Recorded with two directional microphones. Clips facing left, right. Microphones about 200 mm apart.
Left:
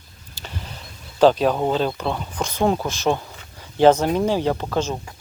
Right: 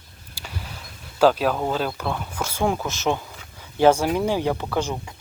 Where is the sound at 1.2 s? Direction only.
10° right (ahead or behind).